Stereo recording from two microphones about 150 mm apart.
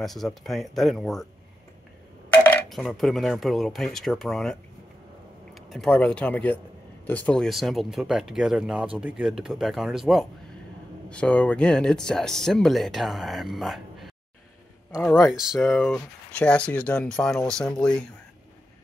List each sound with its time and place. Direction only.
0.0 s speech: centre (ahead or behind)
2.3 s a sound: 10° left (ahead or behind)
2.7 s speech: centre (ahead or behind)
15.3 s speech: 5° right (ahead or behind)